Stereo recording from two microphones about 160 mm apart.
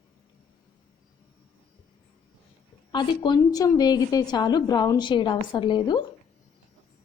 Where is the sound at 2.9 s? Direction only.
30° left (ahead or behind).